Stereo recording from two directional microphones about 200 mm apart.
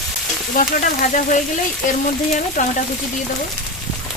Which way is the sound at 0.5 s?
40° left (ahead or behind).